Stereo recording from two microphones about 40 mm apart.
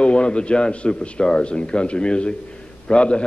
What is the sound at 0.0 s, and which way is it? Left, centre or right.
A man's voice, left.